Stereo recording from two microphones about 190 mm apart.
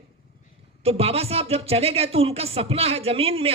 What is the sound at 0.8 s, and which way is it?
A man's voice, 30° right (ahead or behind).